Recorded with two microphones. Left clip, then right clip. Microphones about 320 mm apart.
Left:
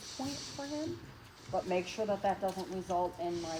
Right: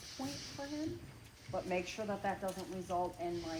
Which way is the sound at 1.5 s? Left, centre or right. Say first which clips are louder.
Left 4 dB; left.